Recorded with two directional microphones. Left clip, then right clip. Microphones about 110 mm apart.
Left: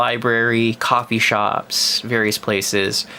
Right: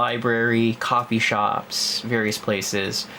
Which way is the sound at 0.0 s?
40° left (ahead or behind).